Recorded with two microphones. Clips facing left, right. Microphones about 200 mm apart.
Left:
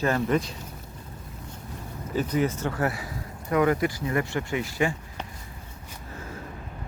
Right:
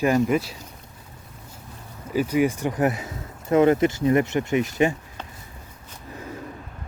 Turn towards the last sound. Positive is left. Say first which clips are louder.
# right 5 dB
turn(degrees=-20)  # may be behind; listen again after turning